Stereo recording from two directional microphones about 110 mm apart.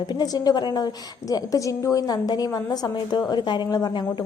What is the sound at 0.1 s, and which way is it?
A woman's voice, 35° left (ahead or behind).